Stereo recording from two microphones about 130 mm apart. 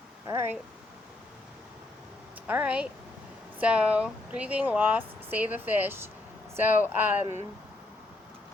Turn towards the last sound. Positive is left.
turn(degrees=-15)  # may be behind; listen again after turning